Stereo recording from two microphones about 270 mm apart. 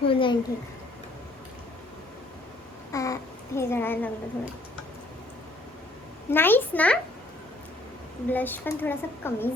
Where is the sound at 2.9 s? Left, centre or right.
Centre.